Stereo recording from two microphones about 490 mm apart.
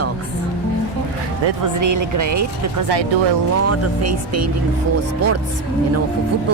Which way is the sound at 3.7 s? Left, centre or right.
Right.